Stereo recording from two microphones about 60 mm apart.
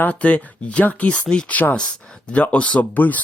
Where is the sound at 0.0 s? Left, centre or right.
Left.